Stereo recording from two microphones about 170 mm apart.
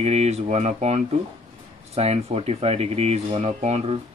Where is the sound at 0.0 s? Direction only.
40° right (ahead or behind).